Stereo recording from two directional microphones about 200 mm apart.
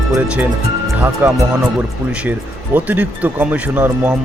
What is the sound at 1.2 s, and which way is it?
Speech, 10° right (ahead or behind).